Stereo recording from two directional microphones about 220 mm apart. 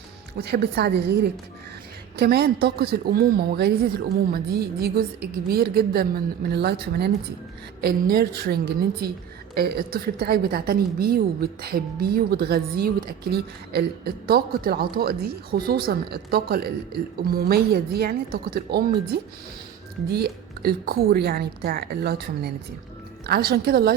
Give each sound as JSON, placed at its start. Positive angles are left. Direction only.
{"t": 0.3, "sound": "a woman's voice", "side_deg": -45}